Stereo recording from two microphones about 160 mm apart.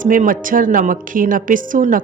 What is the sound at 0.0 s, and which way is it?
Speech, 55° right (ahead or behind).